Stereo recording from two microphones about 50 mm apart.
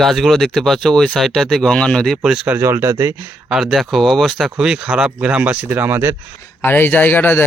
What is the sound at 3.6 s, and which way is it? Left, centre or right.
Speech, centre.